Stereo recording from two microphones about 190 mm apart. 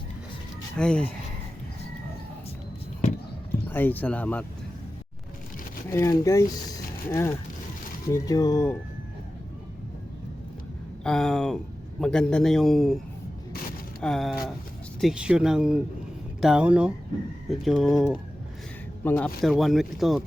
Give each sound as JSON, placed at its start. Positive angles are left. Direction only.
{"t": 0.8, "sound": "a man's voice", "side_deg": 5}
{"t": 3.7, "sound": "speech", "side_deg": 10}
{"t": 5.9, "sound": "speech", "side_deg": 15}
{"t": 11.0, "sound": "a man's voice", "side_deg": 5}
{"t": 14.0, "sound": "a man's voice", "side_deg": 0}